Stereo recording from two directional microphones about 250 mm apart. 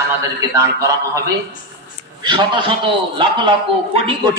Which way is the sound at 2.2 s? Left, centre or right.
Centre.